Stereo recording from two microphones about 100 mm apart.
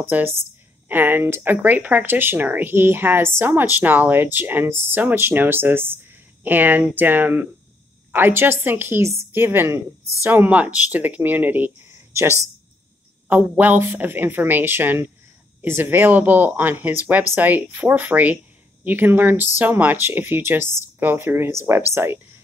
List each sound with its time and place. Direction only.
0.1 s speech: 20° right (ahead or behind)
13.3 s speech: 15° right (ahead or behind)